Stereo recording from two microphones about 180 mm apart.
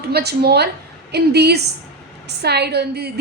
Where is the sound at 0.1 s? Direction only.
65° right (ahead or behind).